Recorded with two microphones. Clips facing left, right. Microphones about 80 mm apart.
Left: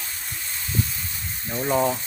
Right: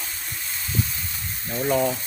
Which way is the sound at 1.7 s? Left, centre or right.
Centre.